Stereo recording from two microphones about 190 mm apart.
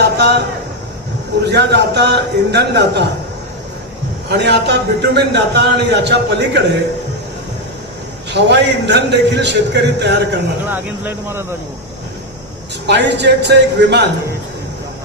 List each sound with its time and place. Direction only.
0.2 s a man's voice: 65° right (ahead or behind)
1.5 s a man's voice: 60° right (ahead or behind)
4.3 s a man's voice: 65° right (ahead or behind)
8.3 s a man's voice: 65° right (ahead or behind)
10.7 s speech: 10° right (ahead or behind)
12.8 s a man's voice: 65° right (ahead or behind)